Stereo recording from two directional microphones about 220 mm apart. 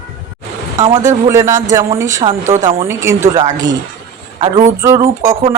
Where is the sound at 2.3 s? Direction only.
35° right (ahead or behind).